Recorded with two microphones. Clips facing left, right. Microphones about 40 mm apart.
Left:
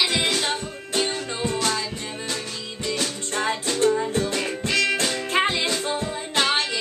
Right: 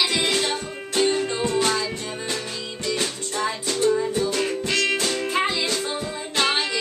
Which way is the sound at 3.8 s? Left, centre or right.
Left.